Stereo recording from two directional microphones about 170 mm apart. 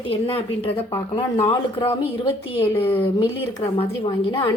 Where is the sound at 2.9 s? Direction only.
10° left (ahead or behind).